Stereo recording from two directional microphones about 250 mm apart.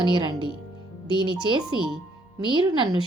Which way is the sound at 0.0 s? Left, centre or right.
Centre.